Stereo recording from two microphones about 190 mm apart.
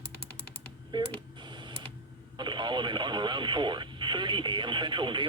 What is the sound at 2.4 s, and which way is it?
Speech, 25° right (ahead or behind).